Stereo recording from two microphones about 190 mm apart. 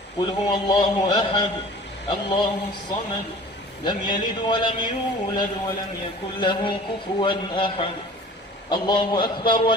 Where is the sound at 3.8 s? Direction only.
25° left (ahead or behind).